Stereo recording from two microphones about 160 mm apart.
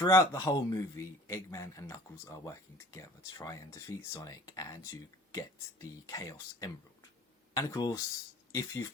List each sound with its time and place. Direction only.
0.0 s a man's voice: 20° left (ahead or behind)